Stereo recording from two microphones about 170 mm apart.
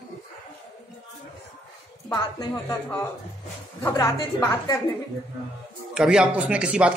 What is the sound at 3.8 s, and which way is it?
Speech, 20° left (ahead or behind).